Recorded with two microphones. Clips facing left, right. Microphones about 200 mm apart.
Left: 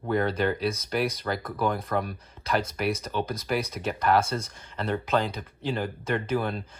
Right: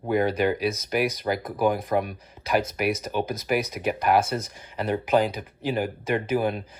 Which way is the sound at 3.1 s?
20° right (ahead or behind).